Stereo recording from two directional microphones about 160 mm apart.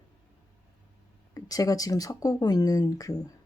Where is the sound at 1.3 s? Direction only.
20° left (ahead or behind).